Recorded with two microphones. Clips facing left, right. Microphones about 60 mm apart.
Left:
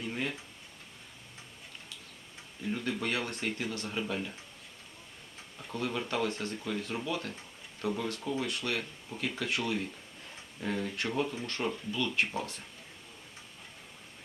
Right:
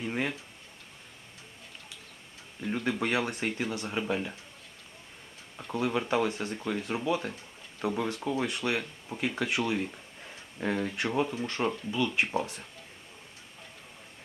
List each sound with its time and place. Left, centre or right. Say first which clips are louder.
0.0 s a sound: right 4 dB; right
2.6 s speech: right 3 dB; right
5.5 s speech: right 5 dB; centre